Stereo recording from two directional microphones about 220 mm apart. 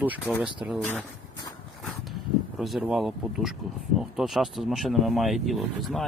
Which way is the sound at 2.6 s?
5° right (ahead or behind).